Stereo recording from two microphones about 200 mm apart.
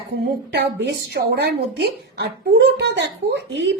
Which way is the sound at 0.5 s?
55° right (ahead or behind).